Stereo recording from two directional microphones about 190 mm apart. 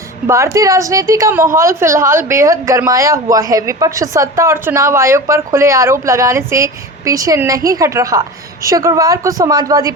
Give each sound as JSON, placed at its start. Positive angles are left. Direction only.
{"t": 0.3, "sound": "a woman's voice", "side_deg": -15}